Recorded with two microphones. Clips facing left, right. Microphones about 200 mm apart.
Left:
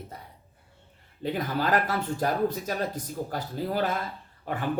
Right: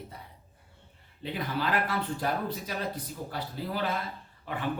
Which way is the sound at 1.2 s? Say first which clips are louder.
Left 4 dB; 45° left (ahead or behind).